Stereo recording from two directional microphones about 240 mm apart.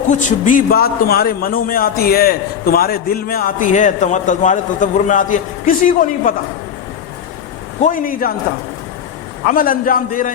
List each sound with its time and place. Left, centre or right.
0.1 s a man's voice: left
7.8 s a man's voice: left
9.5 s a man's voice: left